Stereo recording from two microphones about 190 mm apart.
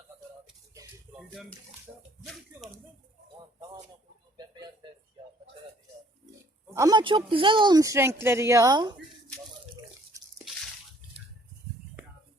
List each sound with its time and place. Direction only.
1.3 s speech: 5° left (ahead or behind)
6.7 s speech: 20° right (ahead or behind)